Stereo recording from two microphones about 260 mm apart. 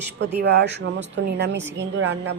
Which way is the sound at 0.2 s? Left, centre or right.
Right.